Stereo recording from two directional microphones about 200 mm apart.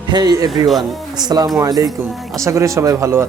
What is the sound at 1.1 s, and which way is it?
Speech, 20° right (ahead or behind).